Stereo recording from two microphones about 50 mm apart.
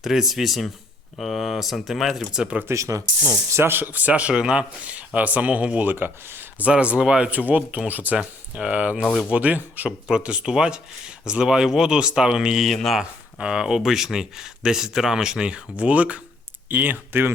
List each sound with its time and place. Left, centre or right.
0.0 s speech: centre
2.6 s speech: right
3.7 s speech: right
5.8 s speech: right
6.7 s speech: right
7.3 s speech: right
8.2 s speech: right
10.1 s speech: centre
12.6 s speech: centre
13.0 s speech: centre; by 17.0 s right
17.1 s speech: right